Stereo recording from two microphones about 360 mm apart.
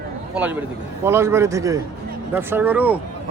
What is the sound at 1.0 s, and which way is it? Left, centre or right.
A man's voice, centre.